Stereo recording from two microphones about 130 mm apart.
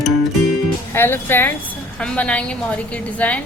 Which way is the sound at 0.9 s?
15° left (ahead or behind).